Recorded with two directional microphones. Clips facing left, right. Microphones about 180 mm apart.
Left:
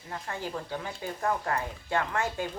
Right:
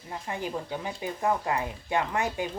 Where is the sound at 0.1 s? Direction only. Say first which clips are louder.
Right 2 dB; 15° right (ahead or behind).